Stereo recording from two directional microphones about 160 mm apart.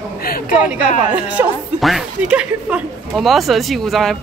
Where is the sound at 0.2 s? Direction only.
70° left (ahead or behind).